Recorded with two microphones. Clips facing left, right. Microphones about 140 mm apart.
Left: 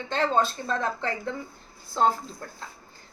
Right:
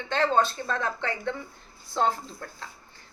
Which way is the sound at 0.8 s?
35° left (ahead or behind).